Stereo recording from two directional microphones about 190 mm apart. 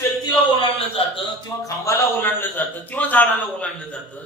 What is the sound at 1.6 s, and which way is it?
A man's voice, 15° left (ahead or behind).